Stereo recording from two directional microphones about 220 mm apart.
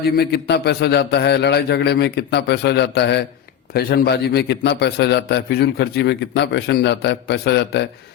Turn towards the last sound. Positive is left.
turn(degrees=50)  # may be behind; listen again after turning